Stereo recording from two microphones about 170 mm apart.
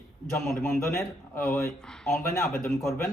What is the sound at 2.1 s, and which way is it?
Speech, 15° left (ahead or behind).